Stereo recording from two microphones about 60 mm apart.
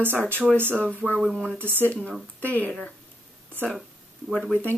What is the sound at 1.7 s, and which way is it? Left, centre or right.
Speech, left.